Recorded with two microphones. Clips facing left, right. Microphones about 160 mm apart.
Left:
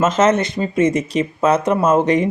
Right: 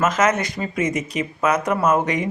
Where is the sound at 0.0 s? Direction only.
25° left (ahead or behind).